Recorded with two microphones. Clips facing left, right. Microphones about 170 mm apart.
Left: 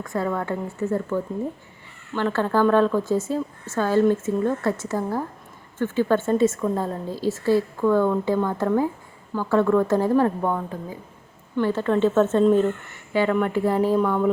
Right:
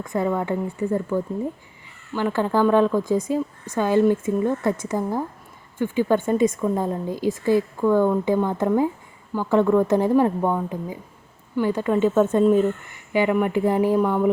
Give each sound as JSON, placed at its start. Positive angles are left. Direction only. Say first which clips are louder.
{"t": 0.0, "sound": "a woman's voice", "louder": "right 2 dB", "side_deg": -20}